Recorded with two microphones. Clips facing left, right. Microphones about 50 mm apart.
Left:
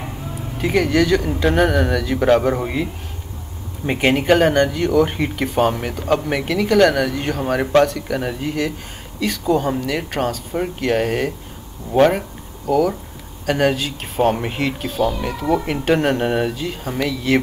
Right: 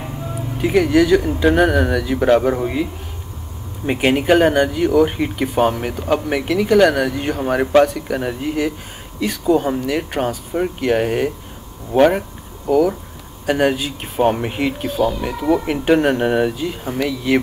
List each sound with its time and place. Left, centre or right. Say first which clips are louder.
0.6 s speech: right 3 dB; centre
3.8 s speech: right 1 dB; centre
12.6 s speech: right 2 dB; centre
14.9 s speech: right 1 dB; right
15.2 s speech: right 2 dB; centre